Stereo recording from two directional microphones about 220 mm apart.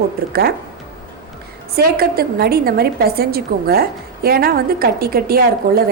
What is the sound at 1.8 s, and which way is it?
A woman's voice, 45° right (ahead or behind).